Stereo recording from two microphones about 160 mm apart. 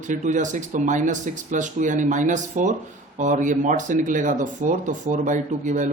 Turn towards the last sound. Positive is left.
turn(degrees=-50)  # may be behind; listen again after turning